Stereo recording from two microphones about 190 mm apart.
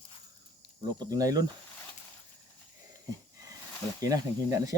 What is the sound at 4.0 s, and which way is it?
Speech, 20° right (ahead or behind).